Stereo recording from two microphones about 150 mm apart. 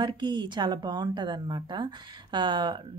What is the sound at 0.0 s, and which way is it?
Speech, 30° right (ahead or behind).